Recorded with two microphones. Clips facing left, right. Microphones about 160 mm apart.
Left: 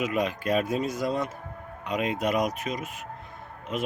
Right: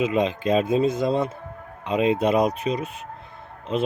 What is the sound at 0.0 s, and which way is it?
A man's voice, 25° right (ahead or behind).